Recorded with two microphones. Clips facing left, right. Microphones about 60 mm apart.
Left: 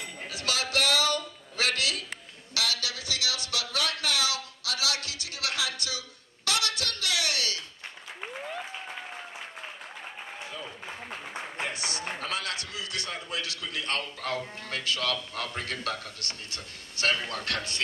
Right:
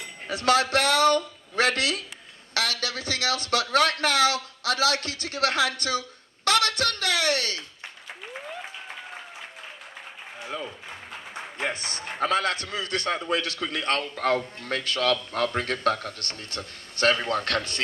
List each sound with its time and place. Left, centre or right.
0.3 s a man's voice: right
11.6 s a sound: right
12.2 s a man's voice: right